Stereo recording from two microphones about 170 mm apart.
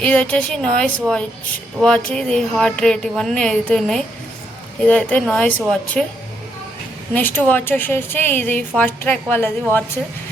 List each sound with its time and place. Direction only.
0.0 s a woman's voice: 10° left (ahead or behind)
7.1 s a woman's voice: 10° left (ahead or behind)